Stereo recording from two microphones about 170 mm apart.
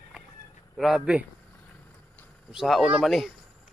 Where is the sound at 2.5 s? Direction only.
Centre (ahead or behind).